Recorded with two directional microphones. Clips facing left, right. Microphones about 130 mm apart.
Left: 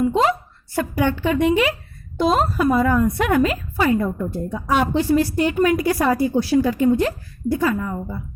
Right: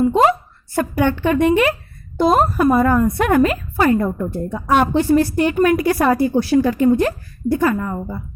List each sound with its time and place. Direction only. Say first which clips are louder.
0.7 s a woman's voice: right 3 dB; 50° right (ahead or behind)